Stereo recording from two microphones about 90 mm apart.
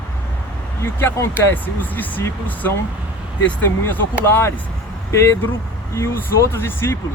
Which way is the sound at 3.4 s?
20° left (ahead or behind).